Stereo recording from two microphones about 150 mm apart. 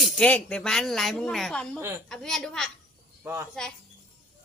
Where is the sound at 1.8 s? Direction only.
15° right (ahead or behind).